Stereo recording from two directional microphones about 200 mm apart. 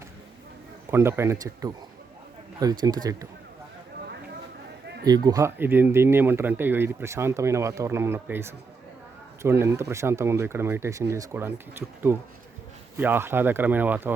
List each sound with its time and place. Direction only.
0.9 s speech: 10° right (ahead or behind)
5.0 s speech: 20° right (ahead or behind)